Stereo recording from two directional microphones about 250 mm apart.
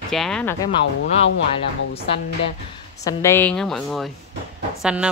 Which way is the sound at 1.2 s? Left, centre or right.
Left.